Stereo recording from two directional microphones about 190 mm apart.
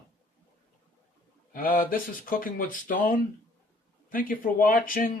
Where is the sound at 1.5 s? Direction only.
50° left (ahead or behind).